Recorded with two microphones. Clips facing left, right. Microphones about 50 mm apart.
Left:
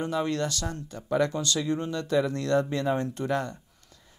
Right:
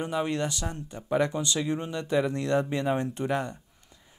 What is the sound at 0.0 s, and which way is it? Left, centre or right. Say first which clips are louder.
Speech: left 1 dB; centre.